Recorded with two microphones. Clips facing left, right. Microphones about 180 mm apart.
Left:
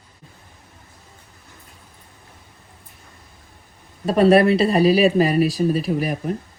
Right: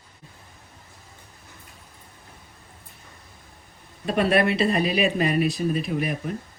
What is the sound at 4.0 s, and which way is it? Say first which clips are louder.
Speech: left 7 dB; 40° left (ahead or behind).